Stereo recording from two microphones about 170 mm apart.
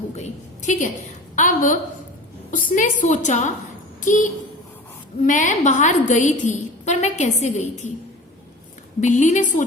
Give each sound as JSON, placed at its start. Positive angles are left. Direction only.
{"t": 0.2, "sound": "a woman's voice", "side_deg": 45}
{"t": 9.0, "sound": "a woman's voice", "side_deg": 45}